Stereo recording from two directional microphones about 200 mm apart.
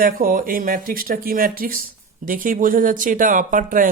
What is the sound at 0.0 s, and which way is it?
Speech, 45° right (ahead or behind).